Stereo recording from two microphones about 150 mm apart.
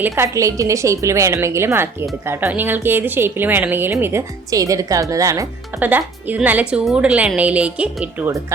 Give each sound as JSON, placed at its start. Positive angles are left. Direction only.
{"t": 0.0, "sound": "a woman's voice", "side_deg": -20}